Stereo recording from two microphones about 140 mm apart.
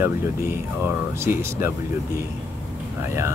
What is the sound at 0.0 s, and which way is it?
Speech, 15° right (ahead or behind).